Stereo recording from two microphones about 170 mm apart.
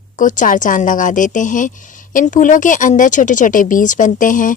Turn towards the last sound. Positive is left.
turn(degrees=50)  # may be behind; listen again after turning